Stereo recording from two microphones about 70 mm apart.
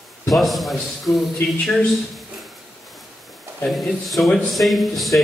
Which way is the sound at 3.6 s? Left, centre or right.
Centre.